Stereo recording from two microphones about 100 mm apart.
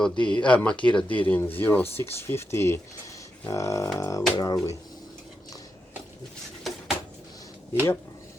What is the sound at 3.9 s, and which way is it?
Didgeridoo, 30° left (ahead or behind).